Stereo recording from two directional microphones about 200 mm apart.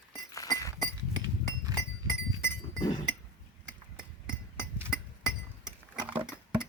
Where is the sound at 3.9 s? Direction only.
5° right (ahead or behind).